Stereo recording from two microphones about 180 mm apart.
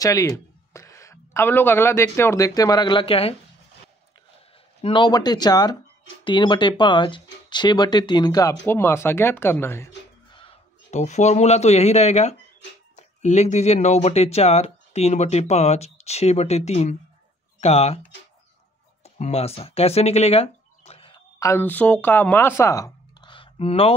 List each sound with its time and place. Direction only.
0.0 s speech: 20° left (ahead or behind)
4.8 s speech: 25° left (ahead or behind)
10.3 s a man's voice: 35° left (ahead or behind)
19.0 s speech: 40° left (ahead or behind)
21.4 s speech: 15° left (ahead or behind); by 23.9 s 30° left (ahead or behind)